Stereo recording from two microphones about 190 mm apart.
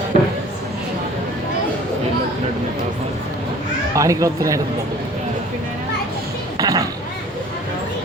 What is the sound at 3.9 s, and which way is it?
Speech, 15° right (ahead or behind).